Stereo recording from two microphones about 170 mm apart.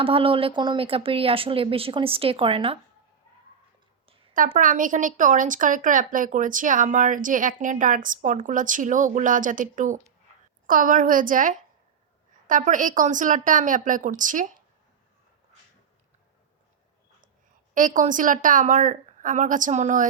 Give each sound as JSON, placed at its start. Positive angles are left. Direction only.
{"t": 0.0, "sound": "speech", "side_deg": -30}
{"t": 4.4, "sound": "speech", "side_deg": -50}
{"t": 17.7, "sound": "speech", "side_deg": -50}